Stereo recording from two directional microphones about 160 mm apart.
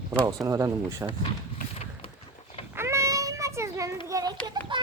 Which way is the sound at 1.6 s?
65° left (ahead or behind).